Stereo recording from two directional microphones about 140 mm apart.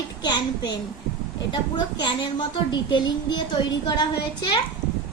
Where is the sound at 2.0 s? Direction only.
35° left (ahead or behind).